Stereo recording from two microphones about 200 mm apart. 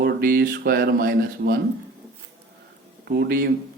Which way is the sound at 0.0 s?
50° right (ahead or behind).